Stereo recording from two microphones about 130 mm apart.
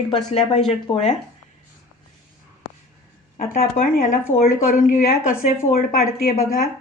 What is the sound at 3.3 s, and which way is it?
Speech, 75° left (ahead or behind).